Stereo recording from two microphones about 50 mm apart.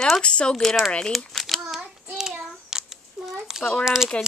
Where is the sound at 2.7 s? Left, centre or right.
Centre.